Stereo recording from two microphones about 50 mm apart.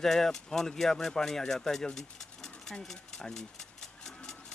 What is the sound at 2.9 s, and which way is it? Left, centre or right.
Speech, centre.